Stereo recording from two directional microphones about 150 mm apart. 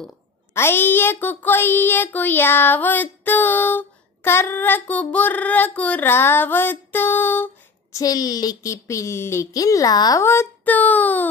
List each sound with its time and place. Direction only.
0.6 s a child's voice: 15° left (ahead or behind)
8.0 s a child's voice: 25° left (ahead or behind)